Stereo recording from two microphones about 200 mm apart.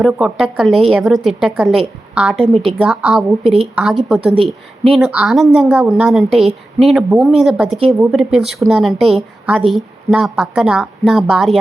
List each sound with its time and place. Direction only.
0.0 s a woman's voice: 5° right (ahead or behind)
3.4 s a woman's voice: 30° right (ahead or behind)
3.8 s a woman's voice: 5° right (ahead or behind)